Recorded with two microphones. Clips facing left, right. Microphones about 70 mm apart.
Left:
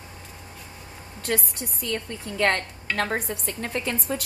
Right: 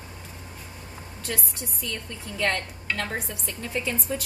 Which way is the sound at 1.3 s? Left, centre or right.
Left.